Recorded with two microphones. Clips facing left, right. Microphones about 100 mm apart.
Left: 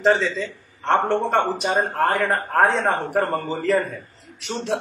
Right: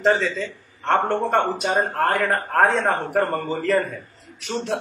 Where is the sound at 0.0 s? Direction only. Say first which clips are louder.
Left 1 dB; centre (ahead or behind).